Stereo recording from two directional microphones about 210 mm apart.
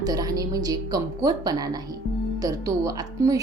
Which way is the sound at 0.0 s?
15° right (ahead or behind).